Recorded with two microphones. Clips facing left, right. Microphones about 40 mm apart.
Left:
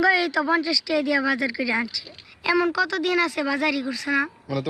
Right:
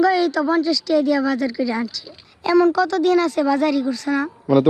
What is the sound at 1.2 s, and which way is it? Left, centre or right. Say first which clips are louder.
Speech: right 3 dB; centre.